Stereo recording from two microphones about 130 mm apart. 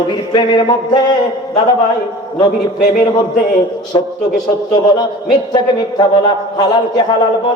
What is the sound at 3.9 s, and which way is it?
Speech, 30° left (ahead or behind).